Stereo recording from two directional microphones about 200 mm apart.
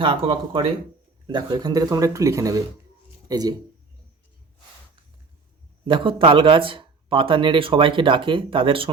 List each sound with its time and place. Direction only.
0.0 s a man's voice: 25° right (ahead or behind)
5.9 s a man's voice: 25° right (ahead or behind)